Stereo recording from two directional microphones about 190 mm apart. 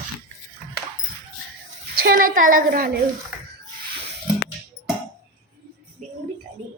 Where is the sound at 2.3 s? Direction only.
45° right (ahead or behind).